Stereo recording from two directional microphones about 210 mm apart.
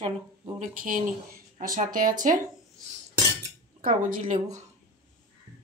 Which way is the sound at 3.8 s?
40° right (ahead or behind).